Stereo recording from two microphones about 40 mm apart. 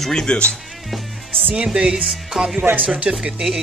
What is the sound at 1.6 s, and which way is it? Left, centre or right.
Speech, centre.